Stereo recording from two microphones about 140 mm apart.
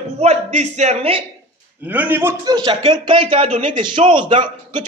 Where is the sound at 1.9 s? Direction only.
10° right (ahead or behind).